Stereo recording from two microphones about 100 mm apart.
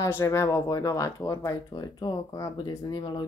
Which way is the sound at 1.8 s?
50° left (ahead or behind).